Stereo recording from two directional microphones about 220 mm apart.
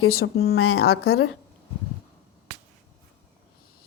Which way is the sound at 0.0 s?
70° left (ahead or behind).